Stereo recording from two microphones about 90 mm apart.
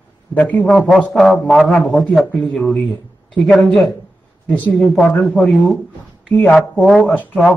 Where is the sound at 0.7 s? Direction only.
Centre (ahead or behind).